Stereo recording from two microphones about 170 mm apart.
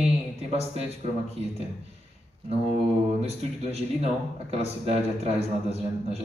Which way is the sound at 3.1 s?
35° right (ahead or behind).